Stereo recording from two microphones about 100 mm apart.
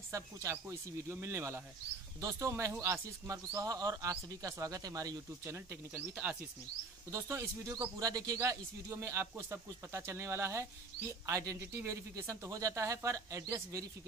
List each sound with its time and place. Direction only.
0.1 s speech: 30° right (ahead or behind)
7.1 s speech: 30° right (ahead or behind)